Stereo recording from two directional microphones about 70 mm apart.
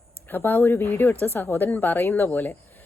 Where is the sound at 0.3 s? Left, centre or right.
Left.